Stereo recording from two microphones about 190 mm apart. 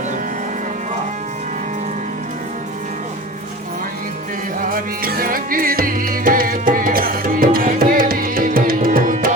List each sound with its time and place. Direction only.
4.7 s music: 50° right (ahead or behind)